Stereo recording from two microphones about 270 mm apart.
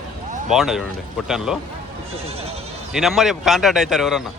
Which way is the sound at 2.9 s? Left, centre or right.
Centre.